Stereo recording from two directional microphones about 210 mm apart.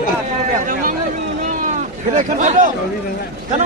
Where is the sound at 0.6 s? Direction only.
40° right (ahead or behind).